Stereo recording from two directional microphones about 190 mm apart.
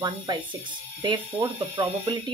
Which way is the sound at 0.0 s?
25° right (ahead or behind).